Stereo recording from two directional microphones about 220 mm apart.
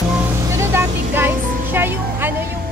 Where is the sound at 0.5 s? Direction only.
10° right (ahead or behind).